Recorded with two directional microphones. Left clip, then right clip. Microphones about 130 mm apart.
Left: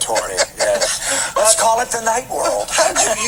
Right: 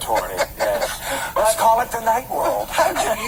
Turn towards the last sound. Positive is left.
turn(degrees=30)  # may be behind; listen again after turning